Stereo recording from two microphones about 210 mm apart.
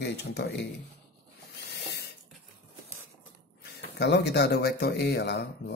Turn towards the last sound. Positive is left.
turn(degrees=55)  # may be behind; listen again after turning